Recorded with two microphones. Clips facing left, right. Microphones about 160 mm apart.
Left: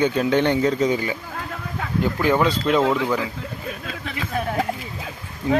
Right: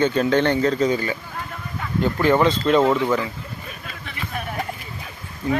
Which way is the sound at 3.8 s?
90° left.